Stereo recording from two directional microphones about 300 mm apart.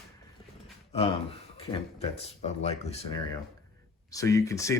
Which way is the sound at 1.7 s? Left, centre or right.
Left.